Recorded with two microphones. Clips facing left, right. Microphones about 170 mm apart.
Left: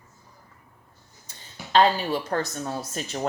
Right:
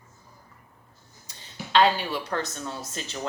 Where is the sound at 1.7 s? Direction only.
40° left (ahead or behind).